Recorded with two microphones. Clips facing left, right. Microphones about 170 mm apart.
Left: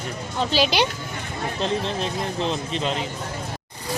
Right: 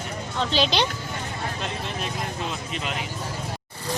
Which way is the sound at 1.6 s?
30° left (ahead or behind).